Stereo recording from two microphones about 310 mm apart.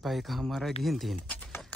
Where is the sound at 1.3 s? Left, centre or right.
Centre.